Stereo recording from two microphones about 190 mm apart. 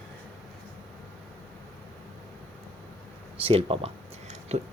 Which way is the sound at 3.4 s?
30° right (ahead or behind).